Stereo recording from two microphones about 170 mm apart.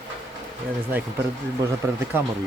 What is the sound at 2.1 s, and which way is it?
Speech, 10° right (ahead or behind).